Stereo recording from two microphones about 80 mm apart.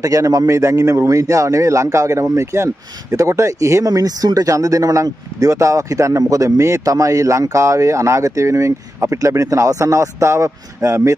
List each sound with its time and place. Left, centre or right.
0.0 s speech: right